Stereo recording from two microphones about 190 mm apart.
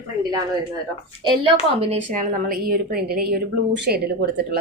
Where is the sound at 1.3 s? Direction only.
30° right (ahead or behind).